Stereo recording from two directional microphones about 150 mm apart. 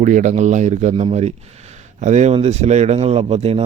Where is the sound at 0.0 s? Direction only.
55° right (ahead or behind).